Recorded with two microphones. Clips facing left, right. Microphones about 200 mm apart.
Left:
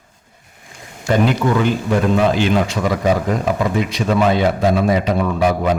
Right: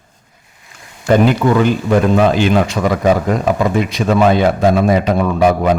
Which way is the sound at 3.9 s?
55° right (ahead or behind).